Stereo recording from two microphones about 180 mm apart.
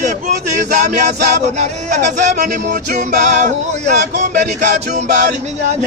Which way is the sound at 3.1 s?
45° right (ahead or behind).